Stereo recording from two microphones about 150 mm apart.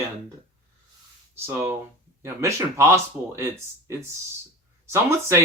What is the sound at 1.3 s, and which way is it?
Speech, 15° right (ahead or behind).